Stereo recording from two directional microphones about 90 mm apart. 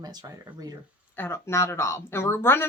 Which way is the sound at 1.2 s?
25° left (ahead or behind).